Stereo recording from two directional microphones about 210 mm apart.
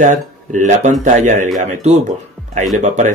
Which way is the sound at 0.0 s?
35° right (ahead or behind).